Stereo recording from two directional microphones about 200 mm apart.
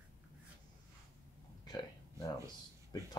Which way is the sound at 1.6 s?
20° left (ahead or behind).